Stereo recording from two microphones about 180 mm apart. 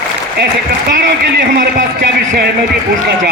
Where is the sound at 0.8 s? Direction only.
60° right (ahead or behind).